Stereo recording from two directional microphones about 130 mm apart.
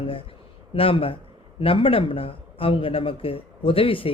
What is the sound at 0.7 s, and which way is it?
A man's voice, 45° left (ahead or behind).